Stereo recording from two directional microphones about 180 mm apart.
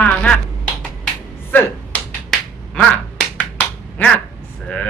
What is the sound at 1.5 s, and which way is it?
Finger snapping, 10° left (ahead or behind).